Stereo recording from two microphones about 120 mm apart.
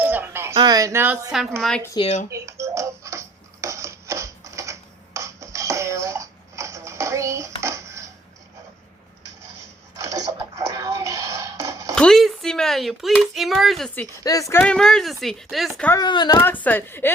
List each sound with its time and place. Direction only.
0.0 s a sound: 15° right (ahead or behind)
0.6 s speech: 30° right (ahead or behind)
2.0 s speech: 40° left (ahead or behind)
2.3 s music: 25° right (ahead or behind)
7.6 s a sound: 25° right (ahead or behind)
9.9 s a sound: 25° right (ahead or behind)
11.9 s speech: 5° left (ahead or behind)
14.3 s speech: 30° left (ahead or behind)
14.6 s speech: 5° left (ahead or behind)
16.0 s speech: 35° left (ahead or behind)
16.4 s a woman's voice: 15° left (ahead or behind)